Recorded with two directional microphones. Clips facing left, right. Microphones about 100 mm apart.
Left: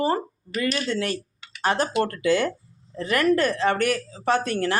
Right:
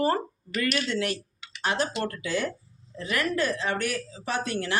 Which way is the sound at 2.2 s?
65° left (ahead or behind).